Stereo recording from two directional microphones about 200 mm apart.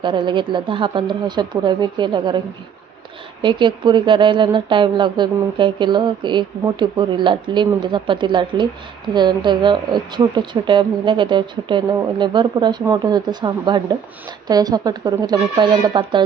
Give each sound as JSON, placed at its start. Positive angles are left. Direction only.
{"t": 0.0, "sound": "speech", "side_deg": -25}
{"t": 3.4, "sound": "speech", "side_deg": -25}